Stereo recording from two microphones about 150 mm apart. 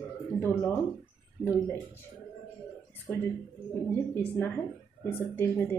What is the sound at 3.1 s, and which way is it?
A woman's voice, 15° left (ahead or behind).